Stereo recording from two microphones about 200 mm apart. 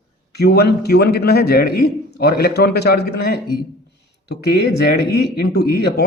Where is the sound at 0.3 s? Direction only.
55° left (ahead or behind).